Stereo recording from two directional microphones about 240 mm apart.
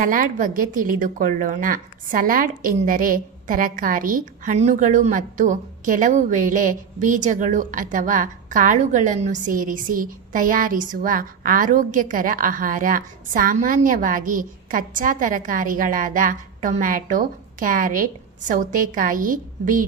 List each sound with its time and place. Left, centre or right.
0.0 s a woman's voice: right